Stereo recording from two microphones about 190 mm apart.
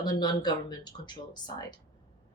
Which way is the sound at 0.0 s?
20° left (ahead or behind).